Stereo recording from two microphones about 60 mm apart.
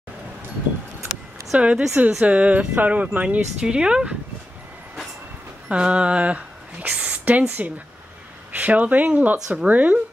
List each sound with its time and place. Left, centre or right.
1.6 s speech: centre
3.6 s speech: centre
5.7 s speech: right